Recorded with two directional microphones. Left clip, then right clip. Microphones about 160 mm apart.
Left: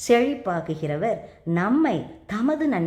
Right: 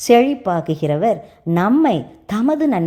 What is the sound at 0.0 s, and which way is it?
A woman's voice, 30° right (ahead or behind).